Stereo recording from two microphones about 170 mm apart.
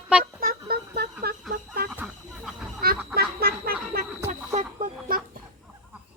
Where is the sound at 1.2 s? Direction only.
65° right (ahead or behind).